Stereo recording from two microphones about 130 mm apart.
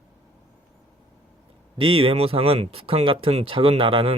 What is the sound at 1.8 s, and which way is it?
Speech, 45° right (ahead or behind).